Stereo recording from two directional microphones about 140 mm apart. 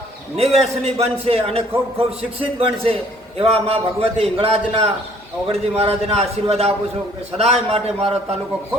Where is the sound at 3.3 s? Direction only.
45° right (ahead or behind).